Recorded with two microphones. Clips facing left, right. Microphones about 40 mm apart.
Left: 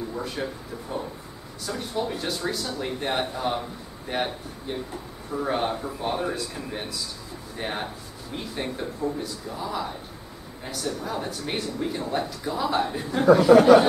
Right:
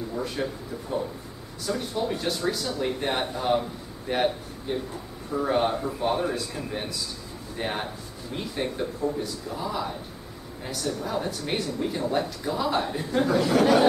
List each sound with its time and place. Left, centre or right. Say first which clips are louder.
0.2 s speech: right 3 dB; centre
1.7 s speech: right 1 dB; centre
13.3 s speech: left 8 dB; centre